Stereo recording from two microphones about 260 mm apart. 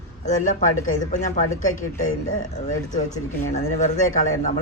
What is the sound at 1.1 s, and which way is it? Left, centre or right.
Speech, left.